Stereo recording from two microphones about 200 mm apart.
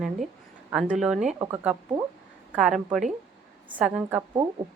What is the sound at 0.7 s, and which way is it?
Speech, 5° right (ahead or behind).